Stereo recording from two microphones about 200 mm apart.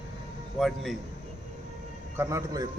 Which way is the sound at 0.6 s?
Centre (ahead or behind).